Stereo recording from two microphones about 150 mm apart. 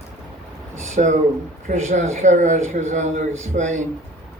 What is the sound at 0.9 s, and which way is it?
Speech, 55° right (ahead or behind).